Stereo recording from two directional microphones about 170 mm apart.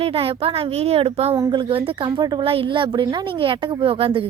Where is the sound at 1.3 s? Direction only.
25° right (ahead or behind).